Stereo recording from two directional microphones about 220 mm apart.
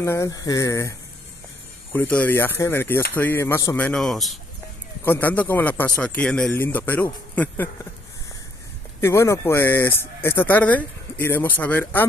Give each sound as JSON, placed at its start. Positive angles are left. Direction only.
{"t": 0.0, "sound": "speech", "side_deg": 10}
{"t": 9.0, "sound": "speech", "side_deg": 10}